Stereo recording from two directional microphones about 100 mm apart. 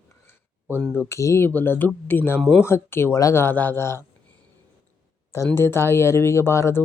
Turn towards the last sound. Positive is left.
turn(degrees=25)  # may be behind; listen again after turning